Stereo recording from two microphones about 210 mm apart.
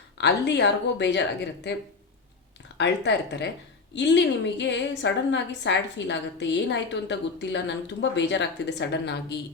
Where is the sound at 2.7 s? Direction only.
55° left (ahead or behind).